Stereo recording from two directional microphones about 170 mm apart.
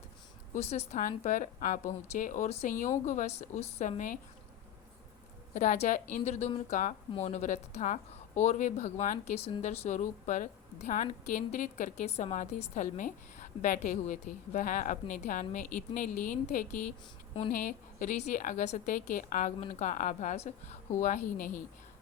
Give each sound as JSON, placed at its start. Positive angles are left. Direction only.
{"t": 0.5, "sound": "speech", "side_deg": 40}
{"t": 5.5, "sound": "a woman's voice", "side_deg": 45}